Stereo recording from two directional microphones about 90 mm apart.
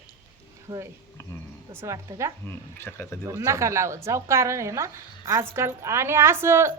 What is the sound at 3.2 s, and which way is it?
A woman's voice, 30° right (ahead or behind).